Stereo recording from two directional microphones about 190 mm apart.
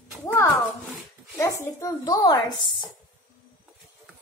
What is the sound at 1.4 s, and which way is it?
A child's voice, 15° left (ahead or behind).